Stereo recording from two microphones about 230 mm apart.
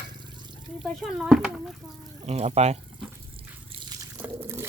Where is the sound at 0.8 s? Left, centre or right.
Centre.